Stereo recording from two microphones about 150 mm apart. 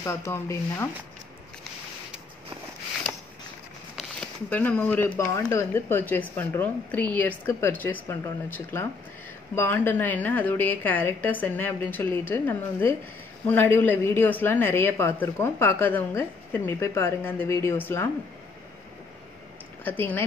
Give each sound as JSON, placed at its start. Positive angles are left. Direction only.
{"t": 0.0, "sound": "a woman's voice", "side_deg": 20}
{"t": 4.5, "sound": "a woman's voice", "side_deg": 10}
{"t": 19.8, "sound": "a woman's voice", "side_deg": 15}